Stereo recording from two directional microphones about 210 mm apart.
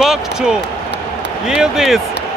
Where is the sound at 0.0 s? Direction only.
Centre (ahead or behind).